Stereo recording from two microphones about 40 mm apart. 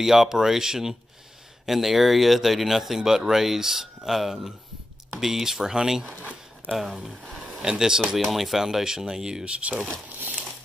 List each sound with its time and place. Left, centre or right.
0.0 s speech: centre
8.2 s speech: centre
10.0 s crumpling: right